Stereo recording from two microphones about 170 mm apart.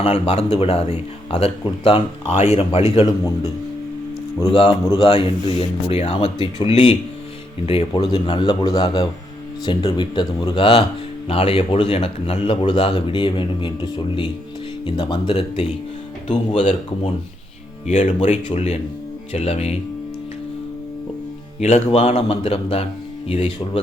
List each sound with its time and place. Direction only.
0.0 s speech: 35° left (ahead or behind)
4.4 s speech: 30° left (ahead or behind)
14.8 s speech: 30° left (ahead or behind)
17.8 s speech: 45° left (ahead or behind)
21.6 s speech: 40° left (ahead or behind)